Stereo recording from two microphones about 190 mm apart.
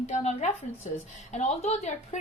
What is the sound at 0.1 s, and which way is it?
A woman's voice, 40° left (ahead or behind).